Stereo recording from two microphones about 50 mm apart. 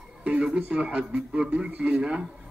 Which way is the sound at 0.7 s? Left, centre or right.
Right.